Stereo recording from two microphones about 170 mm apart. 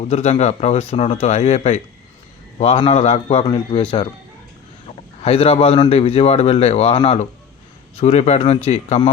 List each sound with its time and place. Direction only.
0.1 s speech: 40° left (ahead or behind)
5.2 s speech: 35° left (ahead or behind)